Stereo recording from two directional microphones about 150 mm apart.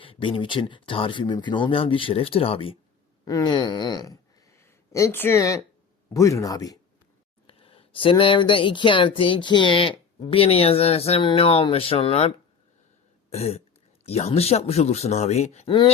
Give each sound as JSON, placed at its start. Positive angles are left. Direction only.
{"t": 0.0, "sound": "speech", "side_deg": 35}
{"t": 3.2, "sound": "speech", "side_deg": 25}
{"t": 7.4, "sound": "speech", "side_deg": 40}
{"t": 13.3, "sound": "speech", "side_deg": 40}